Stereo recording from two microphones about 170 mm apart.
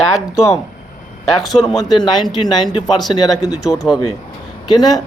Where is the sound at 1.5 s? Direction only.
35° left (ahead or behind).